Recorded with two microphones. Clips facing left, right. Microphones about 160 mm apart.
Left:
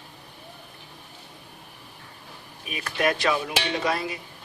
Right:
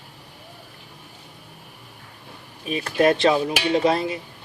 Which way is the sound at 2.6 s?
30° right (ahead or behind).